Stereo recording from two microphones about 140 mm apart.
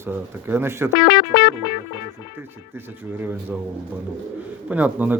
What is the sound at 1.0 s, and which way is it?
Speech, 30° left (ahead or behind).